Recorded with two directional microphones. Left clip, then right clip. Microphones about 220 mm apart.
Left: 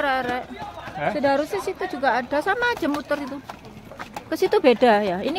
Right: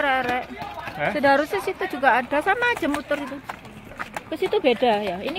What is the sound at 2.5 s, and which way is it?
Speech, 15° left (ahead or behind).